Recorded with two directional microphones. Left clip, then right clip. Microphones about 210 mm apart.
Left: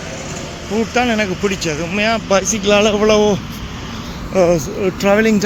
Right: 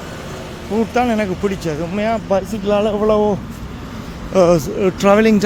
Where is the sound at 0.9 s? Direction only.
15° right (ahead or behind).